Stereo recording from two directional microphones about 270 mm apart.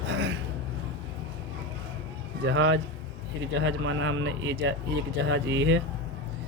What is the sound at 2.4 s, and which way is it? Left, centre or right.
A man's voice, right.